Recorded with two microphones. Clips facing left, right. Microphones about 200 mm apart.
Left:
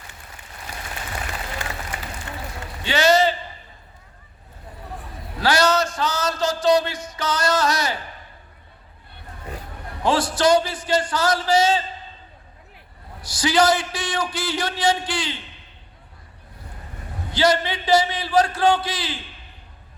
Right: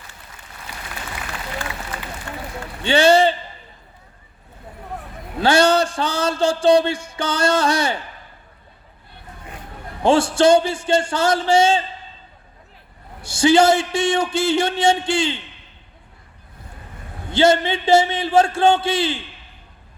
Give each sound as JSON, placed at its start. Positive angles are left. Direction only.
{"t": 0.7, "sound": "applause", "side_deg": 45}
{"t": 2.8, "sound": "a man's voice", "side_deg": -30}
{"t": 5.4, "sound": "a man's voice", "side_deg": -25}
{"t": 10.0, "sound": "a man's voice", "side_deg": -25}
{"t": 13.2, "sound": "a man's voice", "side_deg": -25}
{"t": 17.3, "sound": "a man's voice", "side_deg": -25}